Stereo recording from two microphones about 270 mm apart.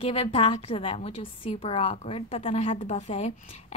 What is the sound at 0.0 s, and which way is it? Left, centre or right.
A woman's voice, left.